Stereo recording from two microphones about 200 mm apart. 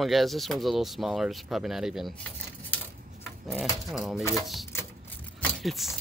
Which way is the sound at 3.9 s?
Centre (ahead or behind).